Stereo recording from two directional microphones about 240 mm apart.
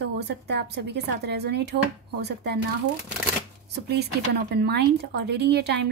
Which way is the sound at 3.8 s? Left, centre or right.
Right.